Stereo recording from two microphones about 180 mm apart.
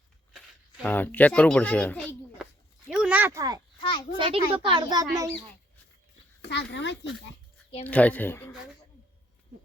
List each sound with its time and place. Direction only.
0.8 s speech: 10° left (ahead or behind)
2.9 s a sound: 5° right (ahead or behind)
3.8 s children playing: 25° left (ahead or behind)
4.2 s speech: 30° right (ahead or behind)
6.5 s a child's voice: 75° left (ahead or behind)
7.9 s speech: 10° left (ahead or behind)